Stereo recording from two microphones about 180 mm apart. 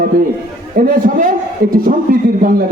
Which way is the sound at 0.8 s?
50° right (ahead or behind).